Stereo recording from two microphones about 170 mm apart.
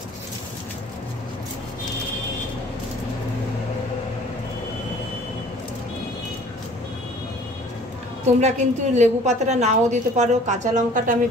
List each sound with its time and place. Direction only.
8.4 s a woman's voice: 40° right (ahead or behind)